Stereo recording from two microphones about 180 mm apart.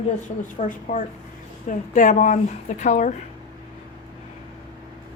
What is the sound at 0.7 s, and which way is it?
A woman's voice, 45° left (ahead or behind).